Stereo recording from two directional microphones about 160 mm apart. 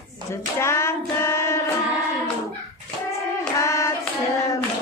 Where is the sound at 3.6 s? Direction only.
20° left (ahead or behind).